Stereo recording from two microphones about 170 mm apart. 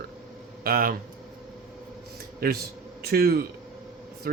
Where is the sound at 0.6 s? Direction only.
60° right (ahead or behind).